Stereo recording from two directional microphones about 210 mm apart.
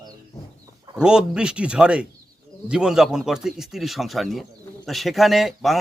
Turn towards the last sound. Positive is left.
turn(degrees=0)  # may be behind; listen again after turning